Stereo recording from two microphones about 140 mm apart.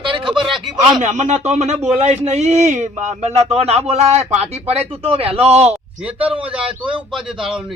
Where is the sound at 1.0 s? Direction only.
55° right (ahead or behind).